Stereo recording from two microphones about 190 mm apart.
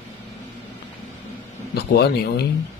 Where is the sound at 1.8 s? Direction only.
60° left (ahead or behind).